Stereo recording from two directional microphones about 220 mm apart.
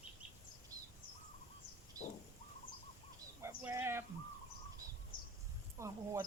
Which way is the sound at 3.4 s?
10° right (ahead or behind).